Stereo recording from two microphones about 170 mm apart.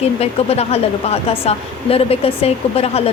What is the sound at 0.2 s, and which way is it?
Speech, 35° left (ahead or behind).